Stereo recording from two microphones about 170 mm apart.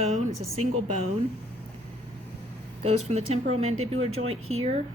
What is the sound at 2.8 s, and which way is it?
A woman's voice, 40° right (ahead or behind).